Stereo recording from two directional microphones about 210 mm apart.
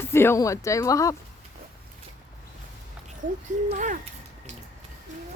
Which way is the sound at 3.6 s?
35° right (ahead or behind).